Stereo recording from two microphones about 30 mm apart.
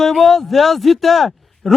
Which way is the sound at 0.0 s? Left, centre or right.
Centre.